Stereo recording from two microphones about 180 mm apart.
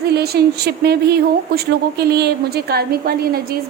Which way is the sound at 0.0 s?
60° right (ahead or behind).